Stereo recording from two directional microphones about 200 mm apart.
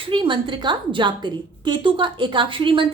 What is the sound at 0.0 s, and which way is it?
A woman's voice, 25° right (ahead or behind).